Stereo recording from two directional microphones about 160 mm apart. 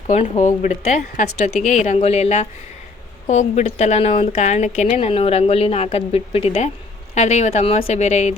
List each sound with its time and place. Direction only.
0.1 s a woman's voice: 50° left (ahead or behind)